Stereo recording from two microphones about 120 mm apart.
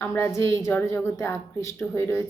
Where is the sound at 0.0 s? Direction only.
25° left (ahead or behind).